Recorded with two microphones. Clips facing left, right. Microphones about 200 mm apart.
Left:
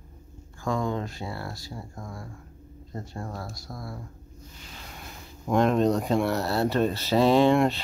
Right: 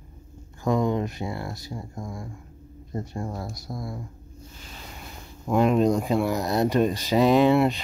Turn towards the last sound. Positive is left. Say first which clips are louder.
# right 1 dB
turn(degrees=-10)  # may be behind; listen again after turning